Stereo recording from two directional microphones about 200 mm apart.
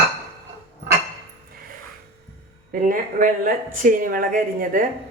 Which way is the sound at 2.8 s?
40° right (ahead or behind).